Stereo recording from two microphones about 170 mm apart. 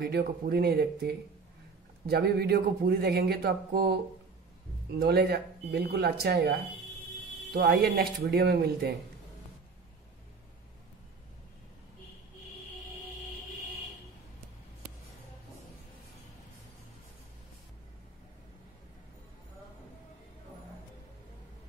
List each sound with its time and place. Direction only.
0.0 s speech: 70° right (ahead or behind)